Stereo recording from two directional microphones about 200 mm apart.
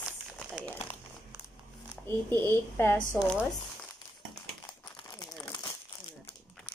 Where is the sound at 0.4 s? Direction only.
5° left (ahead or behind).